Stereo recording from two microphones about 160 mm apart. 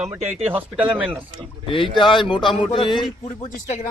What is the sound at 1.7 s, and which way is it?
Speech, 30° left (ahead or behind).